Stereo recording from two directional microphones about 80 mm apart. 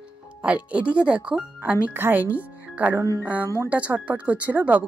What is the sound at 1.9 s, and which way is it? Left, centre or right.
Speech, right.